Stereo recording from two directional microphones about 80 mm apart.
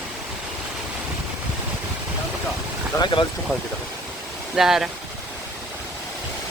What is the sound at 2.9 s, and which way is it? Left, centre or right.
Speech, left.